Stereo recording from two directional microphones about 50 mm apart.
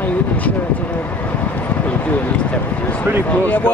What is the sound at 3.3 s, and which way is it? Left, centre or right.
Speech, left.